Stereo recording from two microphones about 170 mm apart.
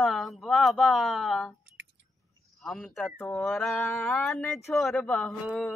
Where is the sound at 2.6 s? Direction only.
Centre (ahead or behind).